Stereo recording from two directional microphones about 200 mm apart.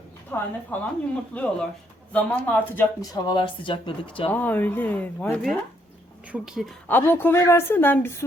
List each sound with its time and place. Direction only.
0.3 s a woman's voice: 10° left (ahead or behind); by 4.1 s 25° left (ahead or behind)
4.3 s a woman's voice: 10° left (ahead or behind)
6.8 s a woman's voice: 10° left (ahead or behind)